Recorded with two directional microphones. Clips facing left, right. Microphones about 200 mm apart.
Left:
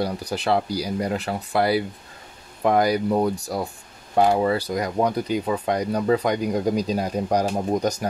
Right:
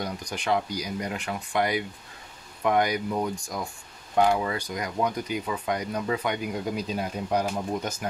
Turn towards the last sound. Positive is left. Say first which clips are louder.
# left 6 dB
turn(degrees=40)  # may be behind; listen again after turning